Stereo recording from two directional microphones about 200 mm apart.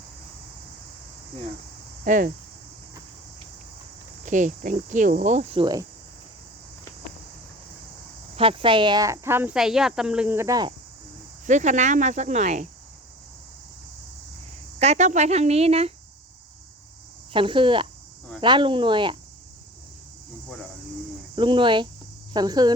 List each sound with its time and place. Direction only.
2.0 s cricket: 40° right (ahead or behind)
4.3 s cricket: 40° right (ahead or behind)
8.4 s speech: 25° right (ahead or behind)
11.4 s cricket: 35° right (ahead or behind)
14.8 s cricket: 35° right (ahead or behind)
17.3 s speech: 25° right (ahead or behind)
21.3 s speech: 25° right (ahead or behind)